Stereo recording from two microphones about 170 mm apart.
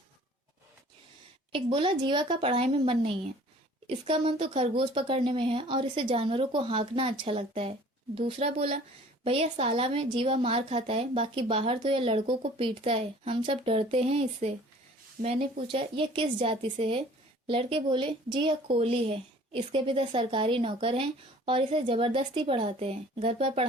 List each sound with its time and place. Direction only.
1.5 s speech: 30° right (ahead or behind)